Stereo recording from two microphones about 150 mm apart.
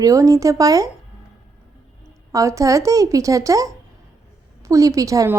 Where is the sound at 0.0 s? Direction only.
20° right (ahead or behind).